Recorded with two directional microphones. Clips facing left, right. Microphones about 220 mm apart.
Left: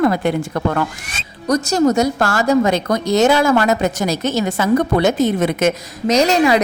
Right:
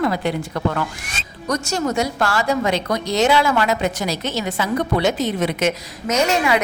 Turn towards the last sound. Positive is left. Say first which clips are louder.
# left 5 dB
turn(degrees=35)  # may be behind; listen again after turning